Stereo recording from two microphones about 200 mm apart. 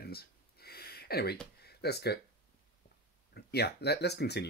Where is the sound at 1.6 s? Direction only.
55° left (ahead or behind).